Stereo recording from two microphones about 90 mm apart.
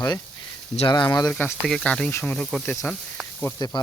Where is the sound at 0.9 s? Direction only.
55° left (ahead or behind).